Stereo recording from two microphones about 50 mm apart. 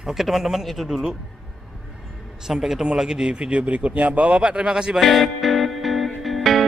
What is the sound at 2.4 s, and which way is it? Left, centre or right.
Speech, centre.